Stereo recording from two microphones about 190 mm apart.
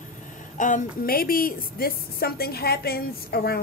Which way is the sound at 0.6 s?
40° left (ahead or behind).